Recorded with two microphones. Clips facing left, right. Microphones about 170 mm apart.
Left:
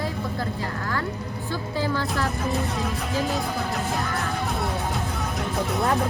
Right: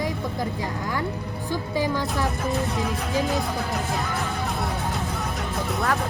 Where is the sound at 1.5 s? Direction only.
15° right (ahead or behind).